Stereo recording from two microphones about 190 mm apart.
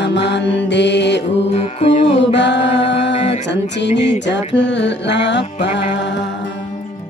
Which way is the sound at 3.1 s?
35° left (ahead or behind).